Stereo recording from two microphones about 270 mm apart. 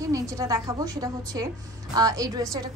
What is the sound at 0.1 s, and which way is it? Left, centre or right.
A woman's voice, centre.